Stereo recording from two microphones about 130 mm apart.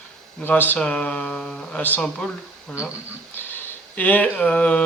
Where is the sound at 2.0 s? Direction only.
5° left (ahead or behind).